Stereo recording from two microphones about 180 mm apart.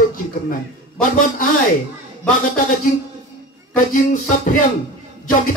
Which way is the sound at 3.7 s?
45° left (ahead or behind).